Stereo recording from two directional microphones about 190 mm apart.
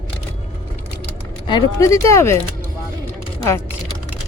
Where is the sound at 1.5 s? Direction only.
20° left (ahead or behind).